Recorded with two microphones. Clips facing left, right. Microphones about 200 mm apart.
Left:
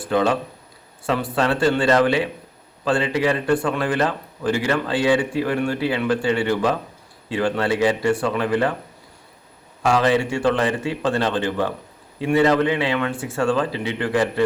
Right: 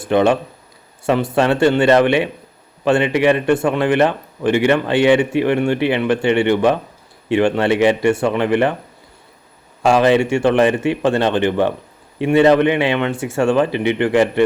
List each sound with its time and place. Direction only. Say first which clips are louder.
0.0 s speech: right 5 dB; 25° right (ahead or behind)
9.8 s speech: right 5 dB; 25° right (ahead or behind)
13.7 s speech: right 8 dB; 80° right
14.0 s speech: right 5 dB; 25° right (ahead or behind)